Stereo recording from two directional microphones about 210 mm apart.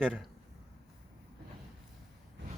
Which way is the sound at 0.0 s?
5° left (ahead or behind).